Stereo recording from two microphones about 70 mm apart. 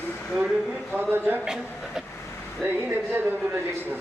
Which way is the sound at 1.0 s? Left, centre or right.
Right.